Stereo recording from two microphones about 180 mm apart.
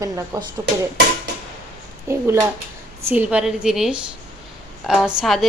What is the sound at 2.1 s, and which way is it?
A woman's voice, 15° right (ahead or behind).